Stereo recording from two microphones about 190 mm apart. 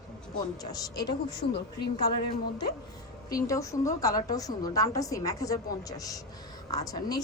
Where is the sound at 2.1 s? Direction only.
60° left (ahead or behind).